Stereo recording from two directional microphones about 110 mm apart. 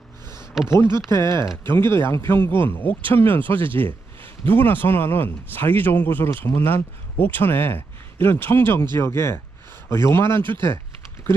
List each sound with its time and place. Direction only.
0.6 s speech: centre (ahead or behind)
1.6 s speech: 20° left (ahead or behind)